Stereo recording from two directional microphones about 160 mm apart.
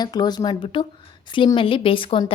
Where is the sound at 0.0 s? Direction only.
25° left (ahead or behind).